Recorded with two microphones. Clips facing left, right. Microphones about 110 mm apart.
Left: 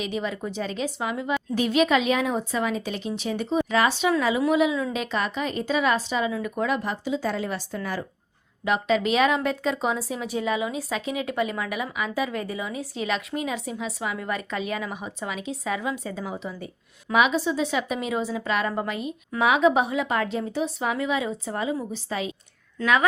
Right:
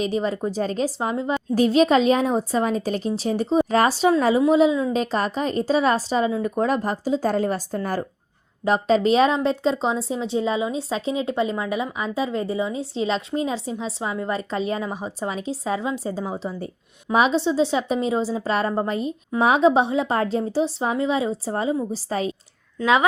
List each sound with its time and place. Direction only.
0.0 s speech: 35° right (ahead or behind)
22.8 s speech: 20° right (ahead or behind)